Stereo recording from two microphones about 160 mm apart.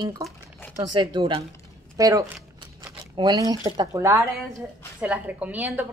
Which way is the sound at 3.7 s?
20° right (ahead or behind).